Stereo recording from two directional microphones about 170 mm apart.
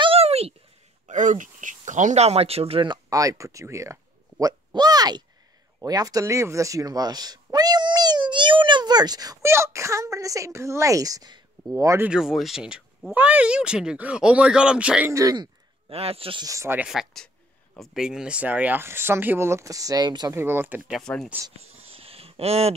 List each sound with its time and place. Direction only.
0.0 s a sound: 35° right (ahead or behind)
1.0 s speech: 45° right (ahead or behind); by 12.1 s 15° right (ahead or behind)
12.1 s speech: 5° right (ahead or behind)
15.1 s speech: 20° right (ahead or behind)
16.4 s speech: 15° right (ahead or behind)
20.3 s speech: 15° right (ahead or behind)
21.0 s speech: 5° left (ahead or behind)
21.5 s a sound: 35° right (ahead or behind)